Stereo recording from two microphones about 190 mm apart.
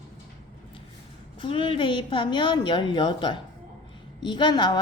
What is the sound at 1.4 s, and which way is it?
A woman's voice, 30° left (ahead or behind).